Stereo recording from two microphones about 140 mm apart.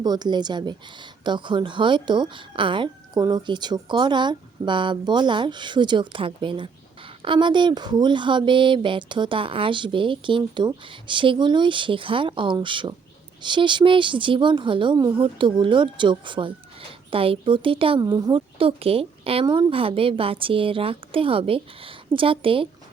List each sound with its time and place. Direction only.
0.0 s a woman's voice: 30° right (ahead or behind)
18.0 s speech: 30° right (ahead or behind)